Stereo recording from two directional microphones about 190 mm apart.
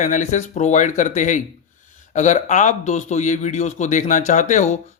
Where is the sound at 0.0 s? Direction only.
40° left (ahead or behind).